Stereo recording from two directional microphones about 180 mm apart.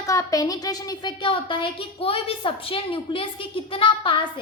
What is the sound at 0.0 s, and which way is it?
A woman's voice, 20° left (ahead or behind).